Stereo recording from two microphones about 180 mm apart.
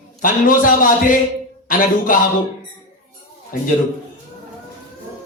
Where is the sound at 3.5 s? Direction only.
50° left (ahead or behind).